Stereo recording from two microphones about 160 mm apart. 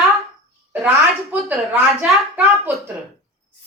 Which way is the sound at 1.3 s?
10° right (ahead or behind).